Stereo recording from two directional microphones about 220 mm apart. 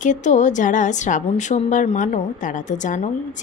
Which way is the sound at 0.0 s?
35° left (ahead or behind).